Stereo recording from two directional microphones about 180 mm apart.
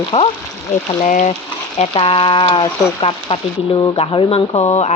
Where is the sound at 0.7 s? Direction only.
45° left (ahead or behind).